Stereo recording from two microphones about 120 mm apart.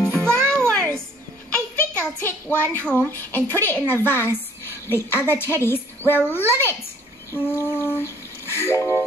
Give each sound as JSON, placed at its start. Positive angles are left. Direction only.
{"t": 0.1, "sound": "music", "side_deg": -20}
{"t": 0.6, "sound": "a sound", "side_deg": 5}
{"t": 3.5, "sound": "a woman's voice", "side_deg": 15}